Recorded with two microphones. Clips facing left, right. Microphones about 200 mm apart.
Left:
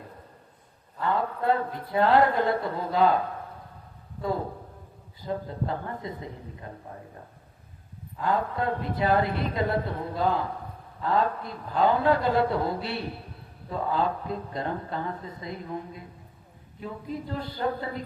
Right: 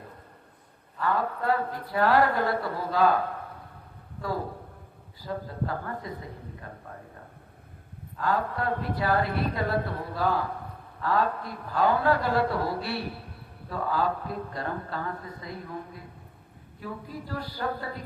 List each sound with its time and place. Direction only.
0.9 s speech: 20° left (ahead or behind)
5.2 s speech: 20° left (ahead or behind)
8.2 s speech: 20° left (ahead or behind)